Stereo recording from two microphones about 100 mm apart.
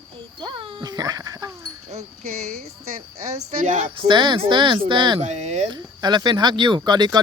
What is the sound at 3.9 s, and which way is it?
Speech, 55° right (ahead or behind).